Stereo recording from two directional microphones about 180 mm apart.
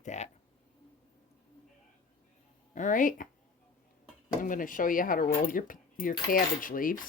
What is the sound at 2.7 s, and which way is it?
Speech, 45° left (ahead or behind).